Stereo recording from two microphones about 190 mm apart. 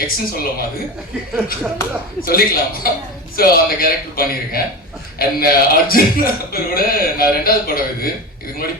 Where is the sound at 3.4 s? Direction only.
50° left (ahead or behind).